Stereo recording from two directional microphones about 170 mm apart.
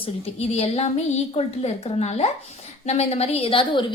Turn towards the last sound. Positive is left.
turn(degrees=30)  # may be behind; listen again after turning